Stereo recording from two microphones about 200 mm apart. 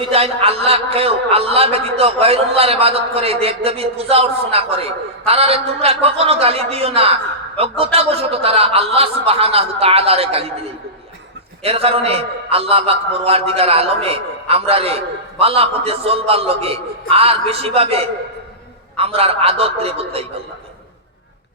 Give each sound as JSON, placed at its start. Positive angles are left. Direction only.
{"t": 0.0, "sound": "a man's voice", "side_deg": -30}
{"t": 11.6, "sound": "a man's voice", "side_deg": -30}